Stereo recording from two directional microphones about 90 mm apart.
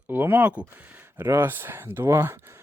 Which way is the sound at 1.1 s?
30° right (ahead or behind).